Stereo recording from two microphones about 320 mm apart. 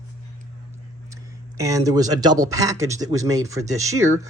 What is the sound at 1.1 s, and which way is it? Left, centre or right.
Speech, centre.